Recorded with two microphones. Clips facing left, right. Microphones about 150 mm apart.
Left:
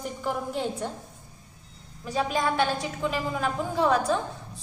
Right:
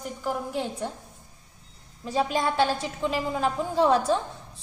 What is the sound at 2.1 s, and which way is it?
A woman's voice, 30° right (ahead or behind).